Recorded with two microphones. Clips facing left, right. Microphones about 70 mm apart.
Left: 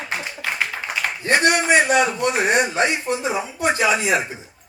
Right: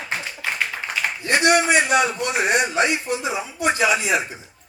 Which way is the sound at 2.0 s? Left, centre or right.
Left.